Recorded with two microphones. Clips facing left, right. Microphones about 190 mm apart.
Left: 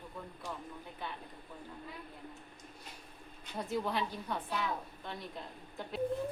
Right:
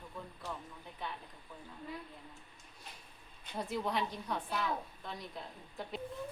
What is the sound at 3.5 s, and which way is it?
A woman's voice, centre (ahead or behind).